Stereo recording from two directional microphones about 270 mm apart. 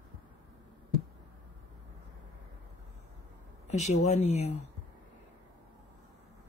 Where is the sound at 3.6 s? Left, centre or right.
Left.